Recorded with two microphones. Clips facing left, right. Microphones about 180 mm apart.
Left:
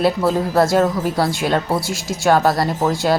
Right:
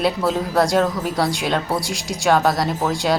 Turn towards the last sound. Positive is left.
turn(degrees=0)  # may be behind; listen again after turning